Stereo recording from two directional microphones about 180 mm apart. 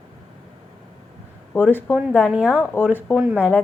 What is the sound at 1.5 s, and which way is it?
Speech, 10° left (ahead or behind).